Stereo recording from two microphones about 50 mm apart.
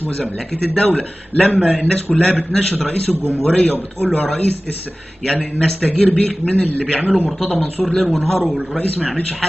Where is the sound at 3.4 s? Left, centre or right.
Left.